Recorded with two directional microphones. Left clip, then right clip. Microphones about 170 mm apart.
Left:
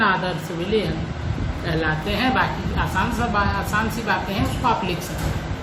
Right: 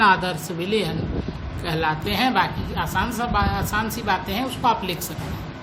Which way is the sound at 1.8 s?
70° right (ahead or behind).